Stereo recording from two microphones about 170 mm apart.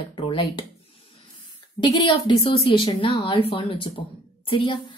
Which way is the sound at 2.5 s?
30° left (ahead or behind).